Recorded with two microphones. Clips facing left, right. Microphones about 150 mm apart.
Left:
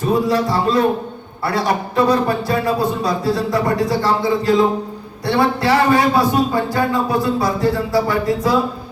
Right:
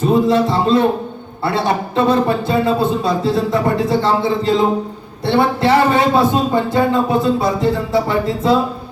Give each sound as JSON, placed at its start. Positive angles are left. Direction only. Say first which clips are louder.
{"t": 0.0, "sound": "a man's voice", "louder": "right 3 dB", "side_deg": -25}